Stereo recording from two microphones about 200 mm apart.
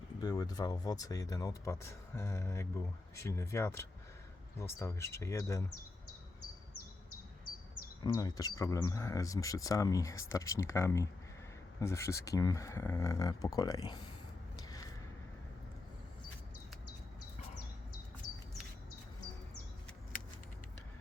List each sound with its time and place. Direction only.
0.2 s speech: 20° left (ahead or behind)
8.0 s speech: 15° left (ahead or behind)
14.7 s a sound: 20° left (ahead or behind)